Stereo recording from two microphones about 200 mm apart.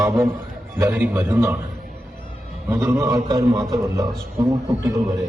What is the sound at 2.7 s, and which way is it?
A man's voice, 10° right (ahead or behind).